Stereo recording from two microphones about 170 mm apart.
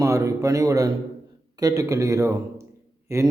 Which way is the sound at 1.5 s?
20° right (ahead or behind).